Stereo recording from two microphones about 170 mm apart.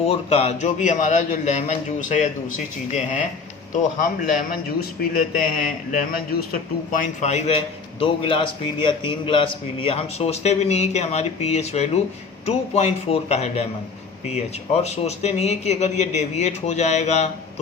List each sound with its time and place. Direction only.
0.0 s a man's voice: 35° left (ahead or behind)
4.8 s a man's voice: 55° left (ahead or behind)
7.2 s a man's voice: 40° left (ahead or behind)